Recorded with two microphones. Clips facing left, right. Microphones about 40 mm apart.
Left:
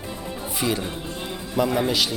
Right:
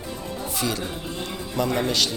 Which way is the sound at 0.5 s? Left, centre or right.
Centre.